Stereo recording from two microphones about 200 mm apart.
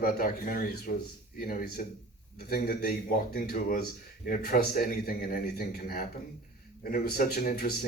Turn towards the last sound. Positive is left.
turn(degrees=50)  # may be behind; listen again after turning